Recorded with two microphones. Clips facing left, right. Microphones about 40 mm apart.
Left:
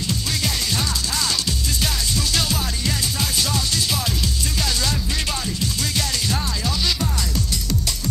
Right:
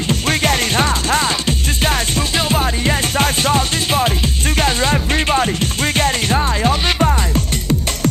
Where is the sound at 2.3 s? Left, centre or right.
Right.